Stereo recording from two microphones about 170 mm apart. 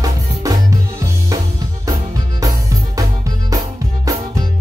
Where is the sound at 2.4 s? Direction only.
20° right (ahead or behind).